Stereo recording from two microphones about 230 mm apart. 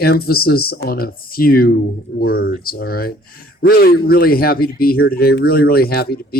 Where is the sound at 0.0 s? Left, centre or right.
Left.